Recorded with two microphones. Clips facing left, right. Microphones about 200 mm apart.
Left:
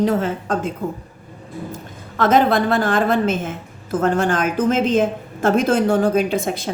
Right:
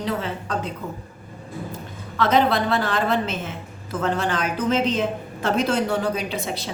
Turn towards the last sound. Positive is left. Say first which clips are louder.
# left 8 dB
turn(degrees=50)  # may be behind; listen again after turning